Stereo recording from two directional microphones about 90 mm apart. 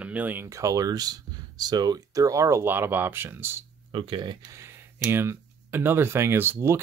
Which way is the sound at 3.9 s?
70° right (ahead or behind).